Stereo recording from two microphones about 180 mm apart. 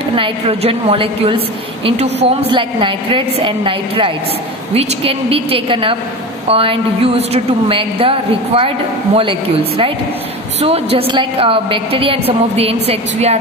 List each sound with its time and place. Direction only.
0.1 s a woman's voice: 30° right (ahead or behind)